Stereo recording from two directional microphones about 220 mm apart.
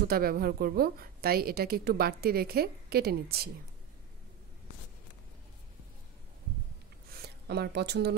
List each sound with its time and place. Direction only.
0.1 s a woman's voice: 45° right (ahead or behind)
7.2 s speech: 45° right (ahead or behind)